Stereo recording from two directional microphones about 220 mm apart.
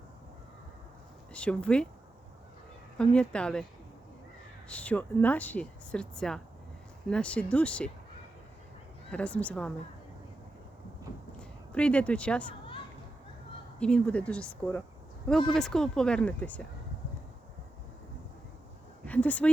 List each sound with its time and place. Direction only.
1.3 s speech: 5° left (ahead or behind)
3.0 s speech: 5° left (ahead or behind)
4.7 s speech: 5° left (ahead or behind)
9.1 s speech: 5° left (ahead or behind)
11.3 s a woman's voice: 5° left (ahead or behind)
13.7 s speech: 5° left (ahead or behind)
19.0 s speech: 5° left (ahead or behind)